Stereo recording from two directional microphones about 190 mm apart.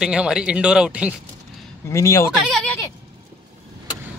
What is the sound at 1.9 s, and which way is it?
Speech, 15° left (ahead or behind).